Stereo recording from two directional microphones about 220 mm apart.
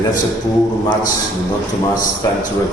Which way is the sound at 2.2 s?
15° left (ahead or behind).